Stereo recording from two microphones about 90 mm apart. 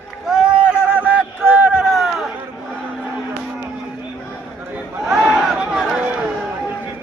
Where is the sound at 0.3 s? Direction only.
10° right (ahead or behind).